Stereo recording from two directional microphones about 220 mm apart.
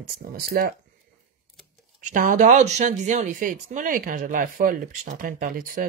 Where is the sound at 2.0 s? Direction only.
35° right (ahead or behind).